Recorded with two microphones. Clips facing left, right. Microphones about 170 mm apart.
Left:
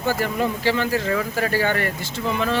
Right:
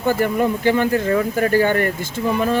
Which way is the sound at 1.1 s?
40° right (ahead or behind).